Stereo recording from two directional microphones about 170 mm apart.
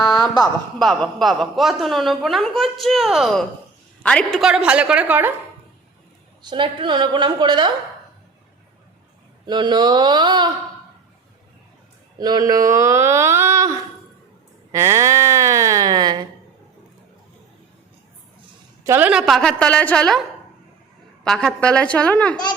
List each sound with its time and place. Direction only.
0.8 s a man's voice: 5° left (ahead or behind)
6.5 s a woman's voice: 30° right (ahead or behind)
9.5 s a woman's voice: 25° right (ahead or behind)
12.1 s speech: 25° right (ahead or behind)
14.7 s a sound: 20° right (ahead or behind)
18.9 s a man's voice: 10° right (ahead or behind)
21.2 s a woman's voice: 5° left (ahead or behind)